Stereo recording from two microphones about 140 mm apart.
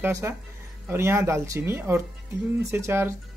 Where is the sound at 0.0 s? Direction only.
15° right (ahead or behind).